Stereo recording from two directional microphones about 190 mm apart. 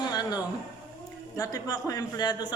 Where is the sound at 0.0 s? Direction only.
20° left (ahead or behind).